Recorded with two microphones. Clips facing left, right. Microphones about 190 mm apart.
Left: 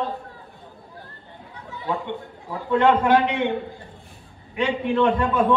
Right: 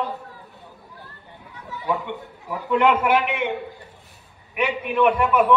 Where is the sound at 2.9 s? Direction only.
20° right (ahead or behind).